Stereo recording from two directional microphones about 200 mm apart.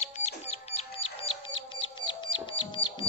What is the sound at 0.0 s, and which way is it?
Music, 35° left (ahead or behind).